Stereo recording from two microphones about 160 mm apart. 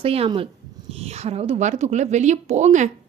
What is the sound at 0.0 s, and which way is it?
A woman's voice, 35° right (ahead or behind).